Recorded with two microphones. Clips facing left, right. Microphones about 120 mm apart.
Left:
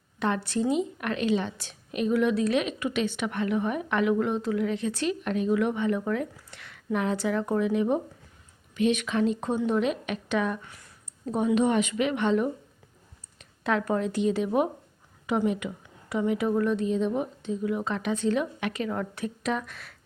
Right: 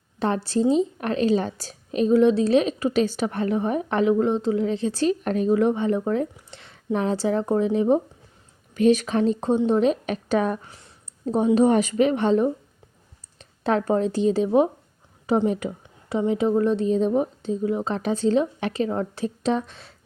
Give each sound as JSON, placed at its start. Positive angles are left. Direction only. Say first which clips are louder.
{"t": 0.2, "sound": "a woman's voice", "louder": "right 5 dB", "side_deg": -30}